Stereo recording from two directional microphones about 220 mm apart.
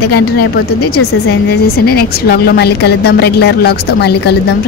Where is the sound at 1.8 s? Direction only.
45° left (ahead or behind).